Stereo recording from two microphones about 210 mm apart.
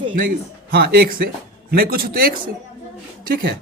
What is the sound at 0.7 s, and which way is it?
Speech, 45° right (ahead or behind).